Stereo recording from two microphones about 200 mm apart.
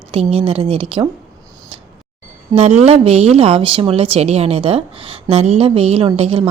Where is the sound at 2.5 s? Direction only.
35° right (ahead or behind).